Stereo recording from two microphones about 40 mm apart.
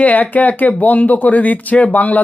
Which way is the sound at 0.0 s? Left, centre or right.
Left.